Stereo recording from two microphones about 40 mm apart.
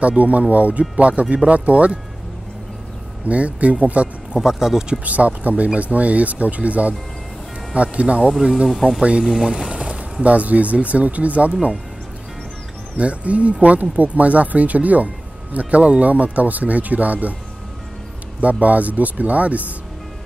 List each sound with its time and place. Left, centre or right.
0.0 s speech: right
3.3 s speech: right
4.4 s speech: centre
5.0 s speech: right
8.3 s speech: centre
9.0 s speech: right
12.9 s speech: right
18.4 s speech: right